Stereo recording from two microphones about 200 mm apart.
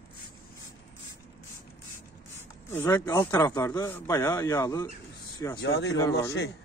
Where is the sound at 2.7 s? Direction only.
10° left (ahead or behind).